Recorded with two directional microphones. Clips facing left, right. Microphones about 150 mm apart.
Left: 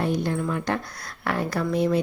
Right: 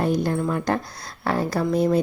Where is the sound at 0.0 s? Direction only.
40° right (ahead or behind).